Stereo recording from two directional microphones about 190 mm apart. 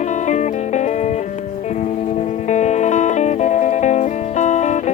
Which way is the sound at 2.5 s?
40° left (ahead or behind).